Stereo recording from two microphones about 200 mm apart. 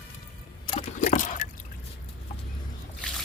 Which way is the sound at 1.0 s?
40° left (ahead or behind).